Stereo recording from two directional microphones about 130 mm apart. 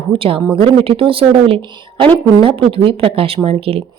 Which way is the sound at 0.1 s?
40° right (ahead or behind).